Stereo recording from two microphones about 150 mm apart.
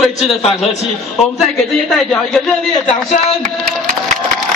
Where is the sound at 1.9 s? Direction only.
5° left (ahead or behind).